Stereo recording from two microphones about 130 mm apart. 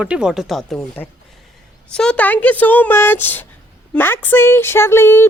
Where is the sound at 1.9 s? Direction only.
5° left (ahead or behind).